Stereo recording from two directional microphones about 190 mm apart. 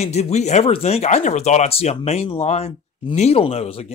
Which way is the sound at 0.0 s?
35° left (ahead or behind).